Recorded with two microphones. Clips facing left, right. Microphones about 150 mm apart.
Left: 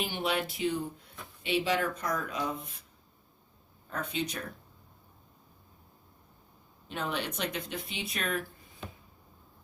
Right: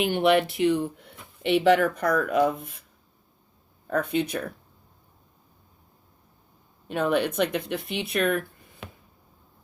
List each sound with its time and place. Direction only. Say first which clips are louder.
0.0 s speech: right 11 dB; 65° right (ahead or behind)
3.8 s speech: right 9 dB; 55° right (ahead or behind)
6.8 s speech: right 10 dB; 55° right (ahead or behind)